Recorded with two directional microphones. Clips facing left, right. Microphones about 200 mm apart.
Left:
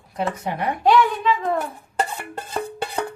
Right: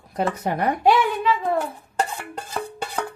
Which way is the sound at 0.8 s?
10° right (ahead or behind).